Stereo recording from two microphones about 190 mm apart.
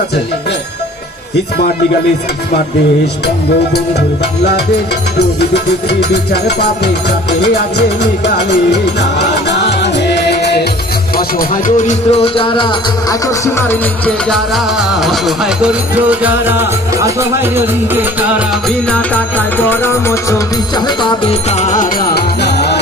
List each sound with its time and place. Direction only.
5.9 s music: 60° left (ahead or behind)
11.3 s music: 45° left (ahead or behind); by 17.5 s 15° right (ahead or behind)
18.9 s music: 10° left (ahead or behind)
20.7 s music: 25° left (ahead or behind)
21.5 s music: 40° left (ahead or behind)
22.1 s music: 60° left (ahead or behind)